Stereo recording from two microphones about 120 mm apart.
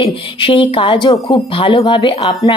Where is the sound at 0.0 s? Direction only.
50° left (ahead or behind).